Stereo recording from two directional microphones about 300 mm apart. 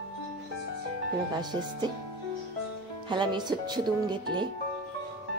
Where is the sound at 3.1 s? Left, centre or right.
Centre.